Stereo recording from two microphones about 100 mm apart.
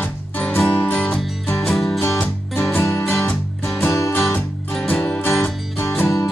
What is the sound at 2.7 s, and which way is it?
Music, 25° left (ahead or behind).